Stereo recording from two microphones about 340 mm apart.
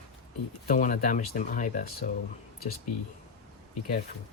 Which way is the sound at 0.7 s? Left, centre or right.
Left.